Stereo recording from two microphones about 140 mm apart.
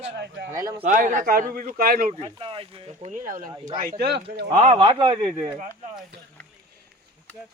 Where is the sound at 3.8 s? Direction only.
90° right.